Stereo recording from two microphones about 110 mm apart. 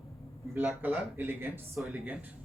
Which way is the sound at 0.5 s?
15° right (ahead or behind).